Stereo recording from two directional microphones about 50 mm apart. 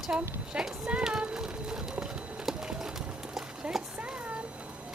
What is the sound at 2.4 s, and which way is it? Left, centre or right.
Clip-clop, centre.